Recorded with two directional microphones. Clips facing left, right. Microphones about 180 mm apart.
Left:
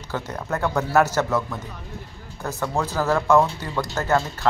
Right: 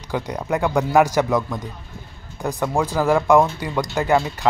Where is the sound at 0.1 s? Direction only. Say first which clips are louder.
Right 4 dB; 15° right (ahead or behind).